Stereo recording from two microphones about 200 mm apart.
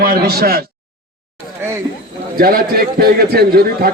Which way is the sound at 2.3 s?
45° right (ahead or behind).